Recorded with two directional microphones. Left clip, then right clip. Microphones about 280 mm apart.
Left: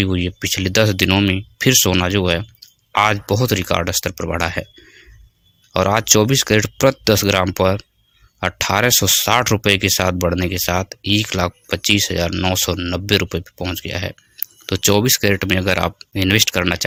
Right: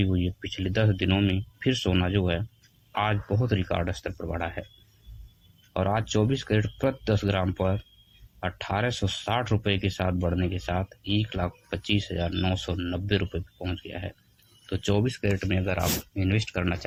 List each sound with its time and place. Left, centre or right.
0.0 s speech: left
5.7 s speech: left